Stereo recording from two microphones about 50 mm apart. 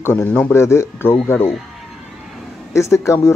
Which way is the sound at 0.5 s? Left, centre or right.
Left.